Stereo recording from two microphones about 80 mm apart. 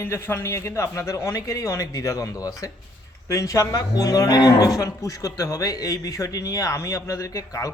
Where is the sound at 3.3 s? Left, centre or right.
Left.